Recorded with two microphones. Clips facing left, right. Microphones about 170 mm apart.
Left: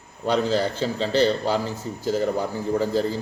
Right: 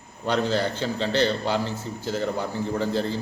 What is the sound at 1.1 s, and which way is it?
Speech, 35° left (ahead or behind).